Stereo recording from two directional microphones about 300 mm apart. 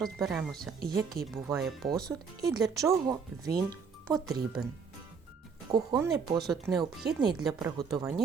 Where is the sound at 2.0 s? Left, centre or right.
Centre.